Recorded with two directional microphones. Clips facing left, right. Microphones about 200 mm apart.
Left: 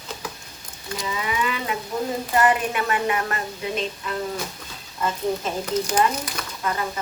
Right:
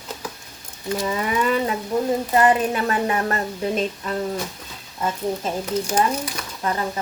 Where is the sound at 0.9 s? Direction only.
45° right (ahead or behind).